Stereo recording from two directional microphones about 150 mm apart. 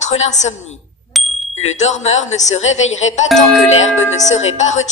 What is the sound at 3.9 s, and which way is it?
Speech, 50° left (ahead or behind).